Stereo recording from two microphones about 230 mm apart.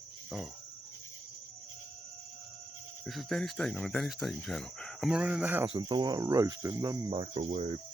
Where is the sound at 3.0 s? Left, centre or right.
Centre.